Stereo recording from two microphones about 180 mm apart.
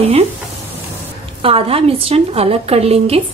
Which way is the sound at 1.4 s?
30° right (ahead or behind).